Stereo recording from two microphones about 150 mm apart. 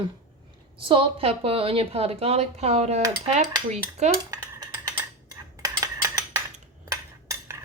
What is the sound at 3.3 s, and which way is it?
Cutlery, 50° right (ahead or behind).